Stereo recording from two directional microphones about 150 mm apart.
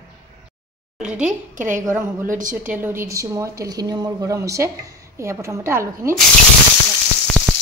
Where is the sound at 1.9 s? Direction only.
15° right (ahead or behind).